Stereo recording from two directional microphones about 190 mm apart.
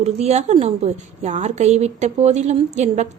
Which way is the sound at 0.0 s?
35° right (ahead or behind).